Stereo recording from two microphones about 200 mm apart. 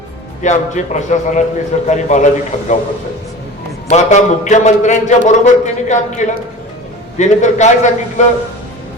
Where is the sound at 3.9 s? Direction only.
35° left (ahead or behind).